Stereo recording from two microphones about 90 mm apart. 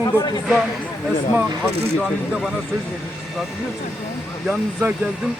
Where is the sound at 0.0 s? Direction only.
40° left (ahead or behind).